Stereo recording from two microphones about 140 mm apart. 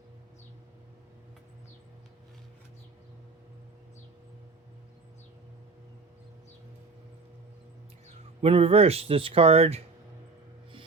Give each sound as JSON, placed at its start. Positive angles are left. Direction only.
{"t": 8.4, "sound": "speech", "side_deg": -45}